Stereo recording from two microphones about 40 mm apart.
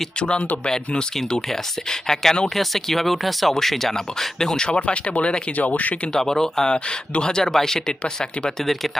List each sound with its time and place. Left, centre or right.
0.2 s speech: left
4.8 s speech: left
5.5 s speech: left
6.1 s speech: centre
6.7 s speech: left
8.6 s speech: centre